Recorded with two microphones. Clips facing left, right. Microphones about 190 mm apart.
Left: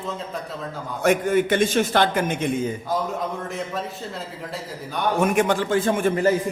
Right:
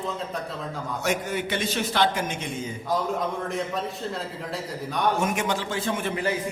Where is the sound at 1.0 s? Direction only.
55° left (ahead or behind).